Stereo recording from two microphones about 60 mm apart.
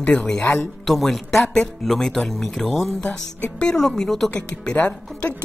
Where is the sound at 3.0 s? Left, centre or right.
Centre.